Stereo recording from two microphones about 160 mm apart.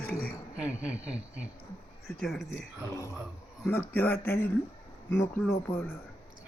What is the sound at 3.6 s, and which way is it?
A man's voice, 10° left (ahead or behind).